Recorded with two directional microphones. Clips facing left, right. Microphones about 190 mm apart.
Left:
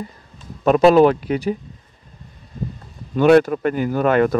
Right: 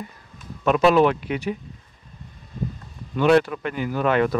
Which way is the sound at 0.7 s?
40° left (ahead or behind).